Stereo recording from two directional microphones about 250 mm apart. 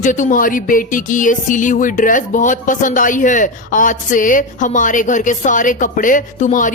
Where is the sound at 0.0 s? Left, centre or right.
Left.